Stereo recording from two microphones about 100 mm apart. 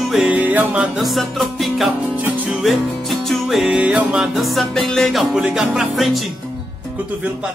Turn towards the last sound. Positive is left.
turn(degrees=0)  # may be behind; listen again after turning